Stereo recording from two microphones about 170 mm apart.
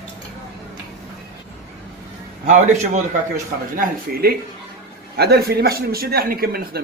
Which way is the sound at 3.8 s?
60° right (ahead or behind).